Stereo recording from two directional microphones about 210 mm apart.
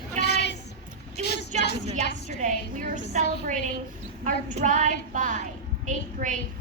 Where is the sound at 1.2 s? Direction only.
50° left (ahead or behind).